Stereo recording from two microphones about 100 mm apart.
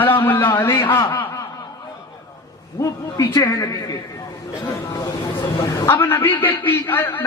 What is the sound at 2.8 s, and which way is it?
A man's voice, 35° left (ahead or behind).